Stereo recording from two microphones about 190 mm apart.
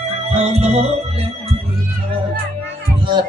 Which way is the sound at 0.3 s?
35° right (ahead or behind).